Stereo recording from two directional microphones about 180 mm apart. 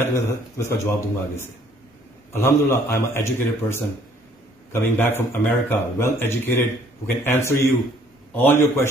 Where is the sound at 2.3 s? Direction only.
15° left (ahead or behind).